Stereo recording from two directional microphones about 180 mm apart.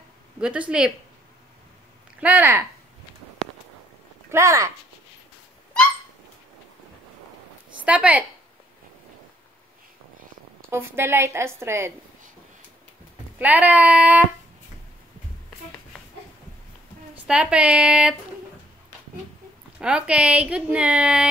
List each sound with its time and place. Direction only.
0.4 s a woman's voice: 5° right (ahead or behind)
2.1 s a woman's voice: 10° right (ahead or behind)
4.3 s a woman's voice: 15° right (ahead or behind)
7.8 s a woman's voice: 5° right (ahead or behind)
10.7 s a woman's voice: 15° right (ahead or behind)
13.4 s a woman's voice: 10° right (ahead or behind)
17.1 s a woman's voice: 5° right (ahead or behind)
19.8 s a woman's voice: 5° right (ahead or behind)